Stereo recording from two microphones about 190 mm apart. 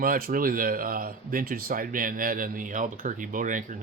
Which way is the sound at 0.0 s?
50° right (ahead or behind).